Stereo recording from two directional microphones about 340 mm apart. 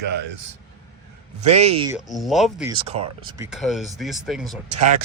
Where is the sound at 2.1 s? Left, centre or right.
Centre.